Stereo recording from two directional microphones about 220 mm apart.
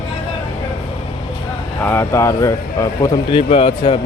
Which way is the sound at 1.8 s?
10° left (ahead or behind).